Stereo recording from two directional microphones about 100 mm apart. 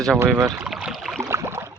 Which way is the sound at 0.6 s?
5° right (ahead or behind).